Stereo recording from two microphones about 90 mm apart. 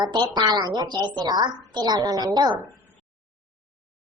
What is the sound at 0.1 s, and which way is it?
Speech, 55° right (ahead or behind).